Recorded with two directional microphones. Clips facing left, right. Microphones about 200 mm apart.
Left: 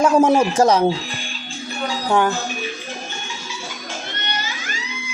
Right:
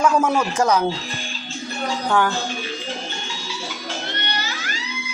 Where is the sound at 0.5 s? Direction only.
35° left (ahead or behind).